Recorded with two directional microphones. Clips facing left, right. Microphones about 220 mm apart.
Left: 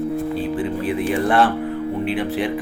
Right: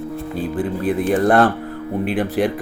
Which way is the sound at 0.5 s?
55° right (ahead or behind).